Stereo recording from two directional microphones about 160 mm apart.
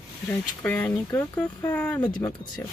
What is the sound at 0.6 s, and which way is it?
Speech, 10° left (ahead or behind).